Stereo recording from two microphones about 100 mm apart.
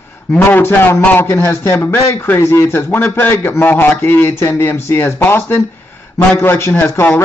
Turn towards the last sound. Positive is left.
turn(degrees=20)  # may be behind; listen again after turning